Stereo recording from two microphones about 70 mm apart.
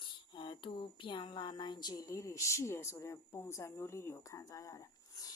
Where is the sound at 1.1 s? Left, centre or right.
Left.